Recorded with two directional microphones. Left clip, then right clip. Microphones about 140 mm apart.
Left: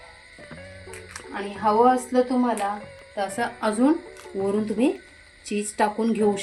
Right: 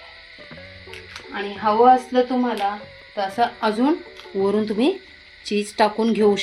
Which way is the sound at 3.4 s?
15° right (ahead or behind).